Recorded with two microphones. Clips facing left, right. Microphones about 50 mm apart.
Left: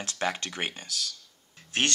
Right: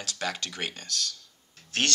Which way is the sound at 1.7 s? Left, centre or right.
Left.